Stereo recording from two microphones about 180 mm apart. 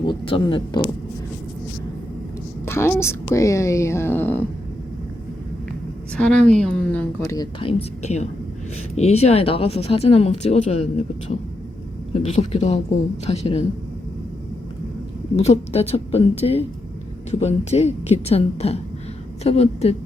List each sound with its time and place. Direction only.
0.0 s speech: 30° left (ahead or behind)
2.6 s speech: 15° left (ahead or behind)
6.1 s speech: 5° left (ahead or behind)
7.3 s speech: 30° left (ahead or behind)
15.4 s a woman's voice: 35° left (ahead or behind)